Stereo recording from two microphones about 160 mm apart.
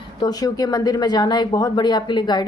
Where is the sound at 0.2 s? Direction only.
25° left (ahead or behind).